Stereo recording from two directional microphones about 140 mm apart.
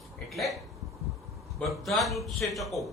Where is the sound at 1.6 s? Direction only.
Centre (ahead or behind).